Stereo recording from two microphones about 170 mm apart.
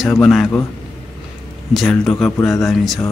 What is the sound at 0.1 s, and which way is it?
Speech, 5° left (ahead or behind).